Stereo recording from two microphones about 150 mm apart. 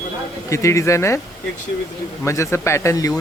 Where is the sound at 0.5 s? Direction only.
20° left (ahead or behind).